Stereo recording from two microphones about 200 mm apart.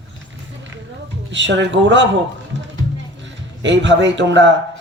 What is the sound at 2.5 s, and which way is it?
Music, 65° right (ahead or behind).